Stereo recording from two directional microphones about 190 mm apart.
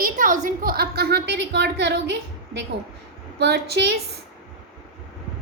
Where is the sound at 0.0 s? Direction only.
45° right (ahead or behind); by 3.9 s 60° right (ahead or behind).